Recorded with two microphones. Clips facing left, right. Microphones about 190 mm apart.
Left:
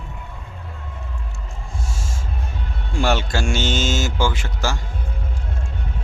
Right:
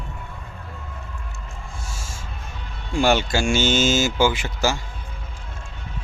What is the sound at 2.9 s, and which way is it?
Speech, centre (ahead or behind).